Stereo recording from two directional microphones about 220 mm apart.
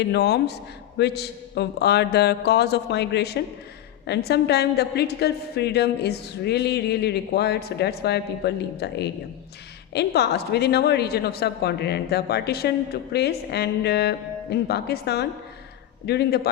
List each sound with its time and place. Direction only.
0.0 s a woman's voice: 50° left (ahead or behind)